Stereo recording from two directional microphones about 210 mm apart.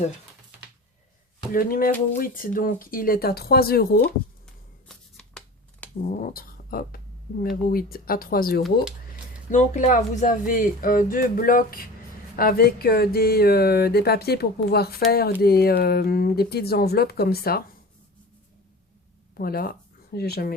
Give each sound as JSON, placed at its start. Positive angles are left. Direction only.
{"t": 1.5, "sound": "speech", "side_deg": 45}
{"t": 4.9, "sound": "a sound", "side_deg": 5}
{"t": 6.1, "sound": "speech", "side_deg": 40}
{"t": 19.3, "sound": "speech", "side_deg": 45}